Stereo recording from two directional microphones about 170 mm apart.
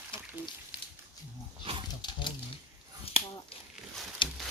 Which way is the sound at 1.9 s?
25° left (ahead or behind).